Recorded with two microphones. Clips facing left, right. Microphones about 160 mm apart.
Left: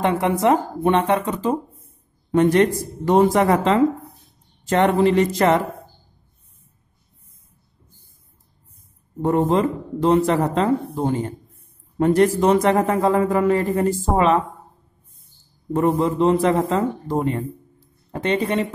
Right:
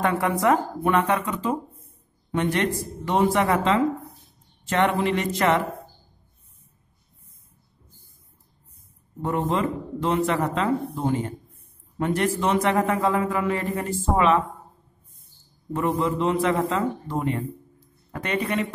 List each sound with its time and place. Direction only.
0.0 s a man's voice: 20° left (ahead or behind)
9.2 s a man's voice: 40° left (ahead or behind)
15.7 s a man's voice: 35° left (ahead or behind)